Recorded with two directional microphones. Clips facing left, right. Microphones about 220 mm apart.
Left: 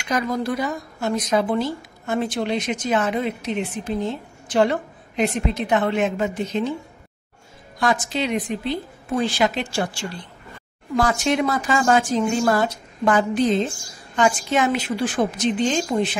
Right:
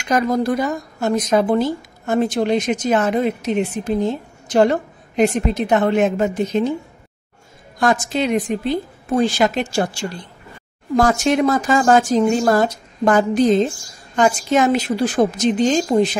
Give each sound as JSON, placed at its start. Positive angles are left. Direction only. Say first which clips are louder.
{"t": 0.0, "sound": "speech", "louder": "right 5 dB", "side_deg": -45}
{"t": 7.8, "sound": "a woman's voice", "louder": "right 4 dB", "side_deg": -45}